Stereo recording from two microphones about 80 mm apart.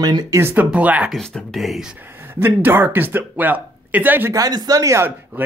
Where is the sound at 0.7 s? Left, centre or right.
Centre.